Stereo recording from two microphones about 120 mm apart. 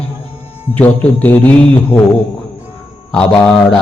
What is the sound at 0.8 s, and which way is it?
A man's voice, 15° left (ahead or behind).